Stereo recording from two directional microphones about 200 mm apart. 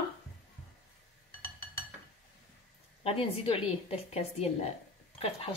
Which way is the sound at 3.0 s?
30° left (ahead or behind).